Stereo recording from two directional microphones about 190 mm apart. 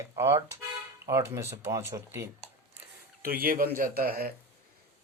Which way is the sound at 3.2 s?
50° right (ahead or behind).